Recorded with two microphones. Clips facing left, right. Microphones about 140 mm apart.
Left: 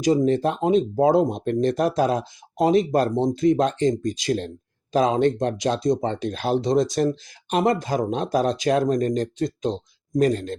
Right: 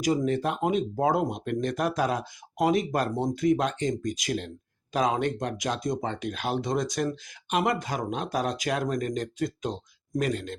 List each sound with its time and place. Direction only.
0.3 s speech: 35° left (ahead or behind)